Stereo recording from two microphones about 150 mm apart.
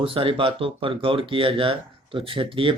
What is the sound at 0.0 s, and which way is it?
Speech, 35° right (ahead or behind).